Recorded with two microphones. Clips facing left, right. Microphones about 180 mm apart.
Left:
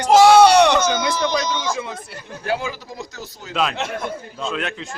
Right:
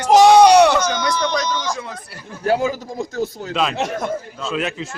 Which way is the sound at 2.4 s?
45° right (ahead or behind).